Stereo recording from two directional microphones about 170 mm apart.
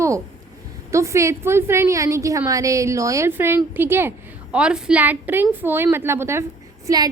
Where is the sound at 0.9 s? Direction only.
15° right (ahead or behind).